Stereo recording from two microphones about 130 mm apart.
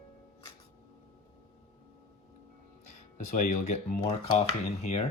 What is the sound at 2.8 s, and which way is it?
Speech, 70° left (ahead or behind).